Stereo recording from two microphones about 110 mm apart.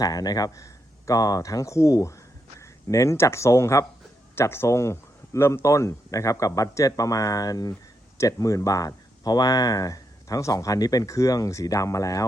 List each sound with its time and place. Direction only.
0.0 s speech: 35° left (ahead or behind)